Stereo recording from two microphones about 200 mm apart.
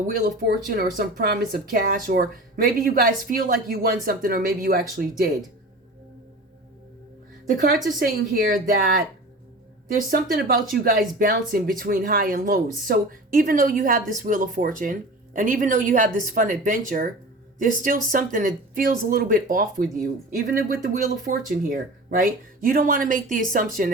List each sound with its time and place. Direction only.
0.2 s speech: 45° right (ahead or behind)
7.5 s speech: 45° right (ahead or behind)